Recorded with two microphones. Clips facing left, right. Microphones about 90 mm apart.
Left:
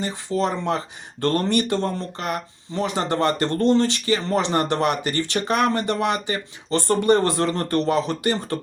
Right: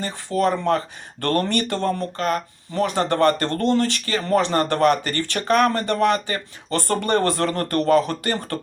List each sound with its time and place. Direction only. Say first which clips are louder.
0.0 s speech: right 2 dB; 15° left (ahead or behind)